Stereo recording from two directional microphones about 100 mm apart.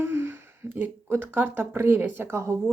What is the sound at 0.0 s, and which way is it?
Speech, 25° right (ahead or behind).